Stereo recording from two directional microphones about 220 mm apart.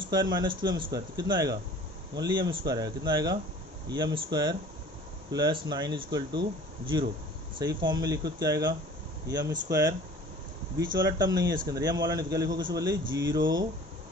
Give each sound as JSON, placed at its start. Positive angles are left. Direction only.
{"t": 0.0, "sound": "speech", "side_deg": -20}
{"t": 7.5, "sound": "speech", "side_deg": -20}